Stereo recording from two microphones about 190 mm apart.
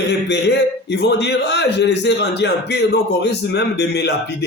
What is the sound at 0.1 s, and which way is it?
A man's voice, 65° left (ahead or behind).